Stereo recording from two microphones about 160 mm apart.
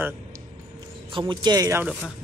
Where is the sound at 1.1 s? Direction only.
30° right (ahead or behind).